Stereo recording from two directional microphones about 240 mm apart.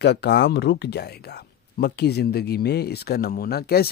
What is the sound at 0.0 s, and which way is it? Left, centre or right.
A man's voice, left.